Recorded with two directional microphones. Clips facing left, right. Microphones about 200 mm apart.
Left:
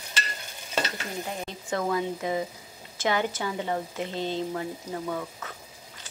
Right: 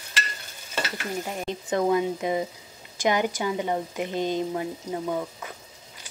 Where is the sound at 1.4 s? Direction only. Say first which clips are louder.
Right 6 dB; 20° right (ahead or behind).